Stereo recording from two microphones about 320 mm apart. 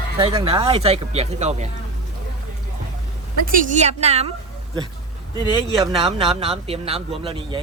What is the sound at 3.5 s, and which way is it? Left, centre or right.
Speech, right.